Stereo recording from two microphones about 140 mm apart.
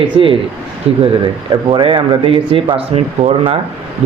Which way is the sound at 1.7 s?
35° right (ahead or behind).